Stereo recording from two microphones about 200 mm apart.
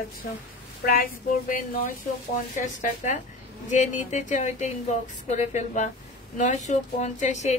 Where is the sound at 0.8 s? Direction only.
45° left (ahead or behind).